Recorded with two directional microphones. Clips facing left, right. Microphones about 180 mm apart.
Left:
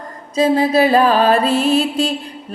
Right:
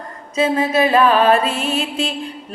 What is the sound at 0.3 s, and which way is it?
Music, 35° left (ahead or behind).